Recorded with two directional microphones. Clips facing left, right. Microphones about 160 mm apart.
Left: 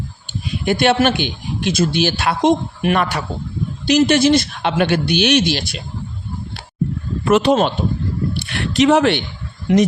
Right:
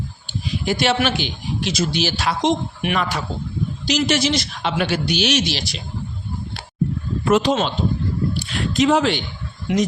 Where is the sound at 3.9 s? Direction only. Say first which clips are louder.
Left 7 dB; 55° left (ahead or behind).